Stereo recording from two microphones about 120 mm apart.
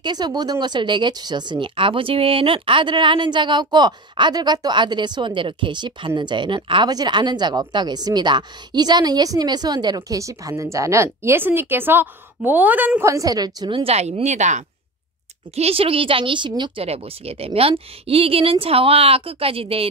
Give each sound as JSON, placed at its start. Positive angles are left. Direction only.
{"t": 0.0, "sound": "a woman's voice", "side_deg": -35}
{"t": 13.1, "sound": "speech", "side_deg": -30}
{"t": 13.9, "sound": "speech", "side_deg": -65}
{"t": 15.5, "sound": "speech", "side_deg": -55}
{"t": 16.8, "sound": "speech", "side_deg": -55}